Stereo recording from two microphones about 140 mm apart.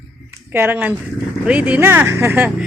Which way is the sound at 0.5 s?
15° right (ahead or behind).